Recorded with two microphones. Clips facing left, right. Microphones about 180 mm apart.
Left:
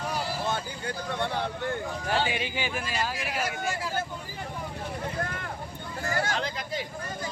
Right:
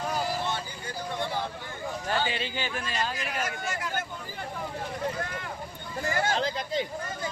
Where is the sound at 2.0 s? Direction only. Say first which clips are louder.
Left 1 dB; 10° left (ahead or behind).